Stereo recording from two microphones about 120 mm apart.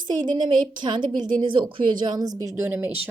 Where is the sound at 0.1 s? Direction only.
35° right (ahead or behind).